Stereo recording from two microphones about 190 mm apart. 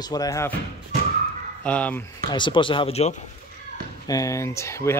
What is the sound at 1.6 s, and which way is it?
Speech, 5° left (ahead or behind).